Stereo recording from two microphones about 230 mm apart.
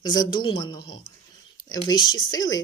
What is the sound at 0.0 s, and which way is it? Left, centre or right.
A man's voice, centre.